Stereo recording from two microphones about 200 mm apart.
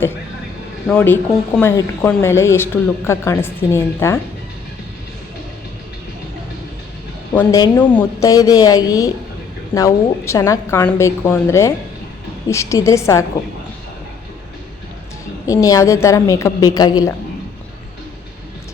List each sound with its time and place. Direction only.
0.9 s speech: 10° left (ahead or behind)
7.3 s speech: 15° left (ahead or behind)
15.4 s speech: 15° left (ahead or behind)